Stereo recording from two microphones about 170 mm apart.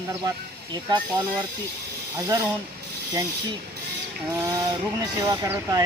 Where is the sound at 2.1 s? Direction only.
20° right (ahead or behind).